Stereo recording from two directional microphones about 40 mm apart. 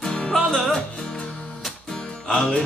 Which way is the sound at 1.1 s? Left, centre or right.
Left.